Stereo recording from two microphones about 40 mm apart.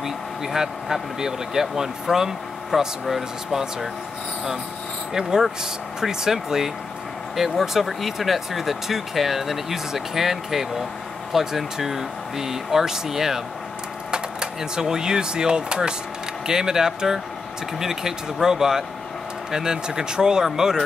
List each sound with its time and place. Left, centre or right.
0.0 s speech: centre
5.6 s speech: centre